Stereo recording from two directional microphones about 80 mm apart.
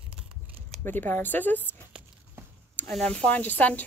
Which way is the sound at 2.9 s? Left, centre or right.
Centre.